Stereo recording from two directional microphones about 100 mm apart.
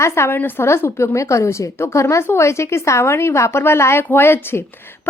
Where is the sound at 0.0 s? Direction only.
25° left (ahead or behind).